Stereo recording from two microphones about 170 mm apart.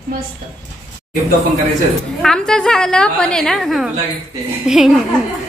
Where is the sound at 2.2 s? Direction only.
5° left (ahead or behind).